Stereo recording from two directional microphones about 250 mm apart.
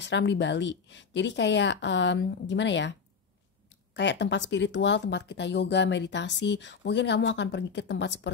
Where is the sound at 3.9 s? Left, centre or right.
Left.